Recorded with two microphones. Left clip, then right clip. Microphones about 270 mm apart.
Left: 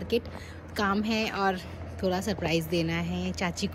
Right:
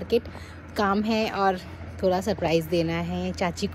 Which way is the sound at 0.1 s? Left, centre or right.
Centre.